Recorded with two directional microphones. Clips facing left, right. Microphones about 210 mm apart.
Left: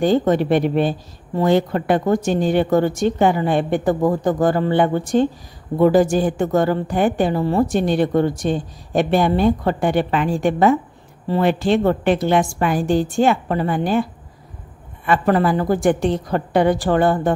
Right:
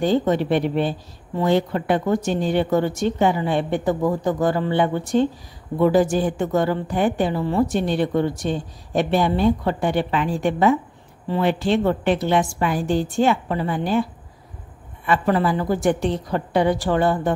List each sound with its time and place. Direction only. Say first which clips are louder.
0.0 s speech: left 3 dB; 50° left (ahead or behind)
15.0 s speech: left 3 dB; 50° left (ahead or behind)